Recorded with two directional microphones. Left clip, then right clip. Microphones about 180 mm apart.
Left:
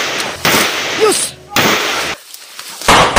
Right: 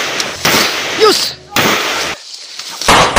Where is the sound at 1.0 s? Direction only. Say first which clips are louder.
Right 4 dB; 10° right (ahead or behind).